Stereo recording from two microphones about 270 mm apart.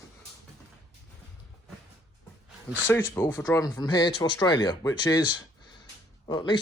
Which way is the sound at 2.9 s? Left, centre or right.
Centre.